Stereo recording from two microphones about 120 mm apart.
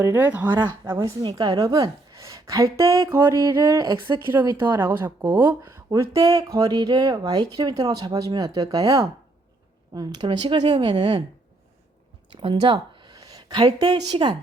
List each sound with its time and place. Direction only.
0.0 s speech: 15° right (ahead or behind)
0.8 s a woman's voice: 30° right (ahead or behind)
12.3 s a woman's voice: 45° right (ahead or behind)